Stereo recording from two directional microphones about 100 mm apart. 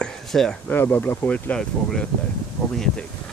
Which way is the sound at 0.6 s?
20° left (ahead or behind).